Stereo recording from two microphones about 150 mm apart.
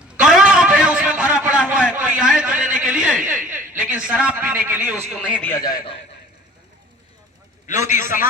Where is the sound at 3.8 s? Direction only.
10° right (ahead or behind).